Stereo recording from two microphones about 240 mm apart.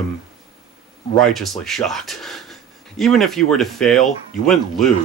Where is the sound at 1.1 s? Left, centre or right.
Centre.